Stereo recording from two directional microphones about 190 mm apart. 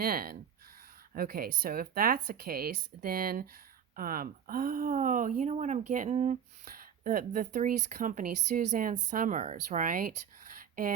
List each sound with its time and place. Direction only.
0.0 s speech: 50° right (ahead or behind)